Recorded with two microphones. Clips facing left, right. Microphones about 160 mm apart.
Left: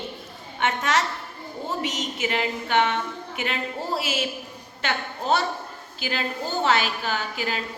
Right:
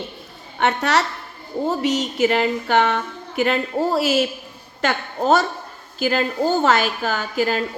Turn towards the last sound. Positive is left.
turn(degrees=-45)  # may be behind; listen again after turning